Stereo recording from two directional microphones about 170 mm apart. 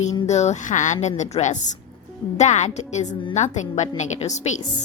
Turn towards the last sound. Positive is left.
turn(degrees=45)  # may be behind; listen again after turning